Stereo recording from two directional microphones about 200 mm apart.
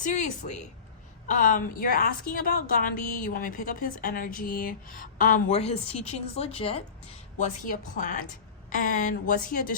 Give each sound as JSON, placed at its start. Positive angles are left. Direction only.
{"t": 0.0, "sound": "a woman's voice", "side_deg": 35}
{"t": 7.3, "sound": "speech", "side_deg": 40}